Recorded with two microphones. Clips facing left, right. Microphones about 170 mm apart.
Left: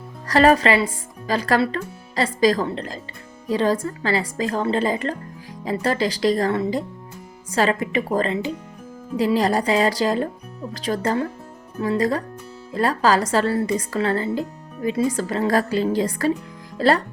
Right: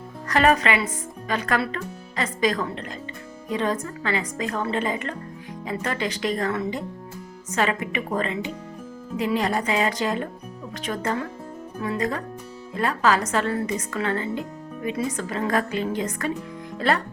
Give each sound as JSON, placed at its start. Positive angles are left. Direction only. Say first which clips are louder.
{"t": 0.3, "sound": "a woman's voice", "louder": "left 4 dB", "side_deg": 35}